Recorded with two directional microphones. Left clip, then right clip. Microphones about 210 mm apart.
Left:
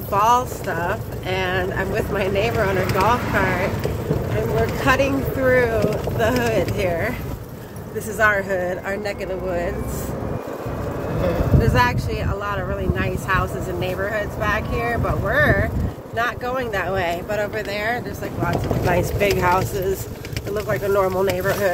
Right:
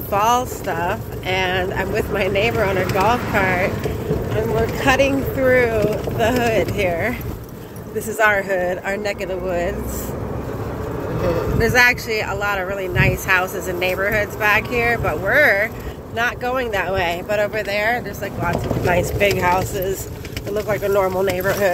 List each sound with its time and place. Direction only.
0.1 s speech: centre (ahead or behind)
5.0 s speech: 10° left (ahead or behind)
8.2 s speech: centre (ahead or behind)
11.6 s speech: centre (ahead or behind)
18.9 s speech: 15° left (ahead or behind)
20.9 s speech: centre (ahead or behind)